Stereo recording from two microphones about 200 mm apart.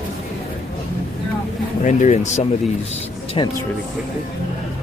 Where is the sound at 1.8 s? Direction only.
35° left (ahead or behind).